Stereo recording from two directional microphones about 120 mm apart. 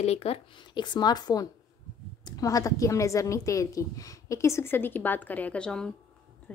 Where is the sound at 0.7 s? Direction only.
35° left (ahead or behind).